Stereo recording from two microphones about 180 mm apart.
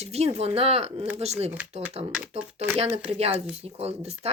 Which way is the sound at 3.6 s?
35° right (ahead or behind).